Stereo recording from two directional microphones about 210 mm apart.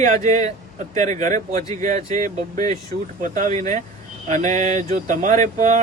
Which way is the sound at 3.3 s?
35° right (ahead or behind).